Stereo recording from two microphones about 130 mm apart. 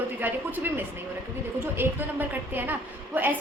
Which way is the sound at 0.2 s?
15° right (ahead or behind).